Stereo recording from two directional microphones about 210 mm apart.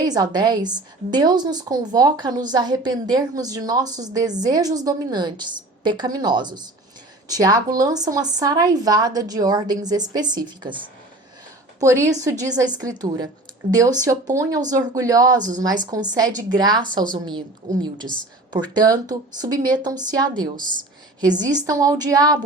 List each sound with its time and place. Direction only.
0.0 s a woman's voice: 20° right (ahead or behind)
11.8 s a woman's voice: 15° right (ahead or behind)
15.4 s a woman's voice: 35° right (ahead or behind)
15.9 s a woman's voice: 20° right (ahead or behind)
18.5 s a woman's voice: 20° right (ahead or behind)